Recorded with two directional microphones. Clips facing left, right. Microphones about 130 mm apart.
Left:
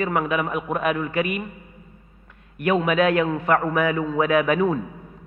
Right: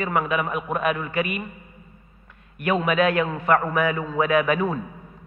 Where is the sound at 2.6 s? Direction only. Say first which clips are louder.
Left 1 dB; 20° left (ahead or behind).